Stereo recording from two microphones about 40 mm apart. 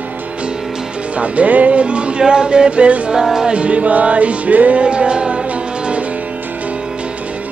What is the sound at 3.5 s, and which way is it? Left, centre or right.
Music, right.